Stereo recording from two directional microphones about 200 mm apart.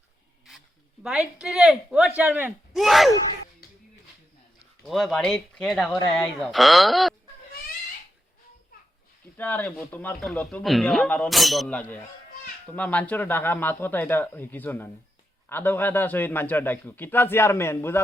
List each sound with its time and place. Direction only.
1.0 s speech: 5° right (ahead or behind)
4.8 s speech: centre (ahead or behind)
9.4 s a man's voice: 10° left (ahead or behind)